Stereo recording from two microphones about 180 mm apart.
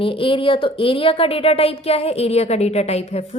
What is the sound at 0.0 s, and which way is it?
A woman's voice, 30° left (ahead or behind).